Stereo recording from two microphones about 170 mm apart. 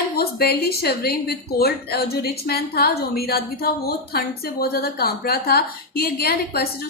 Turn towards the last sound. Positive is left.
turn(degrees=65)  # may be behind; listen again after turning